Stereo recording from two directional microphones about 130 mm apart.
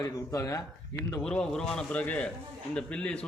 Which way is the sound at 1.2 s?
5° left (ahead or behind).